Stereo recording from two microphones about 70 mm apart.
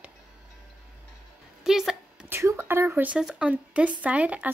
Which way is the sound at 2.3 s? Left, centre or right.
Right.